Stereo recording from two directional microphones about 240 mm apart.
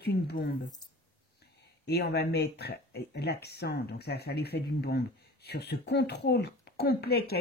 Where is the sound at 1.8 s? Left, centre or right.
Left.